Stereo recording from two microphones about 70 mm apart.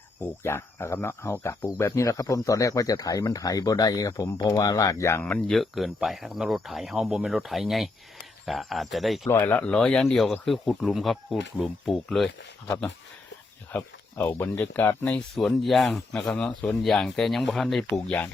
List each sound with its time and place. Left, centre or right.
0.2 s speech: left
1.6 s speech: left
5.5 s speech: centre
9.3 s speech: left
9.6 s speech: centre
13.7 s speech: left
15.4 s speech: centre